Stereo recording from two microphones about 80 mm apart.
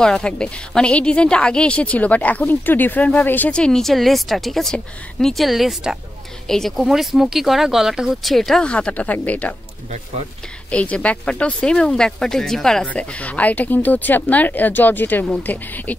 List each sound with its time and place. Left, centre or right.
0.0 s a woman's voice: centre
8.6 s speech: centre
10.7 s a woman's voice: centre